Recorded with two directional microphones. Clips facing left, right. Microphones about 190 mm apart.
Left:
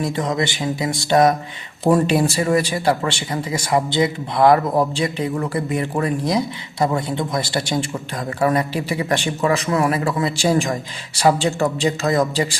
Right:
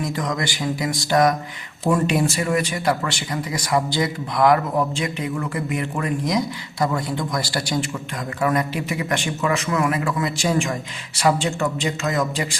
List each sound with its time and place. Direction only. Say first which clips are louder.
0.0 s speech: left 4 dB; 25° left (ahead or behind)